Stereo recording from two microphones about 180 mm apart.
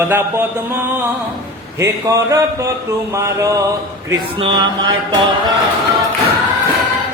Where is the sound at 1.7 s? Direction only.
15° right (ahead or behind).